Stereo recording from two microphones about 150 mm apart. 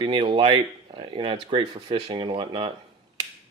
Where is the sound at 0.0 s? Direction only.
35° right (ahead or behind).